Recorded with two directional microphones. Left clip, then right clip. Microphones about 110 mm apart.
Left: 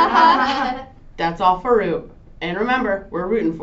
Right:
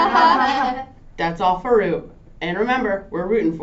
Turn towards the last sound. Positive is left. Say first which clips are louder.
# right 1 dB
turn(degrees=-35)  # may be behind; listen again after turning